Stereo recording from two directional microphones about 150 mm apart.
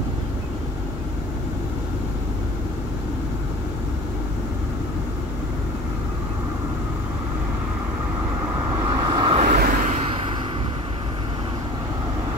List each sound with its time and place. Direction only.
9.0 s vehicle: 35° right (ahead or behind)
9.4 s vehicle: 65° right (ahead or behind)